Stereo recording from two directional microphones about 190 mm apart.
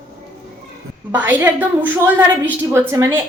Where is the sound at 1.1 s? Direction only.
10° right (ahead or behind).